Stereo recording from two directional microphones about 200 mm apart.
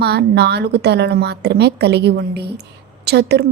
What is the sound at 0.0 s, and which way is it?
A woman's voice, 55° right (ahead or behind).